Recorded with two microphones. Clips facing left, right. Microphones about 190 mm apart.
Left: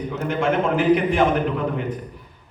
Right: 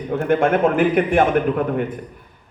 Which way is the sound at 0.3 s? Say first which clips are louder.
Right 4 dB; 55° right (ahead or behind).